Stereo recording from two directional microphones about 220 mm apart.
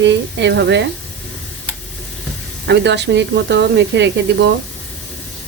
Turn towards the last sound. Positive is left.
turn(degrees=-50)  # may be behind; listen again after turning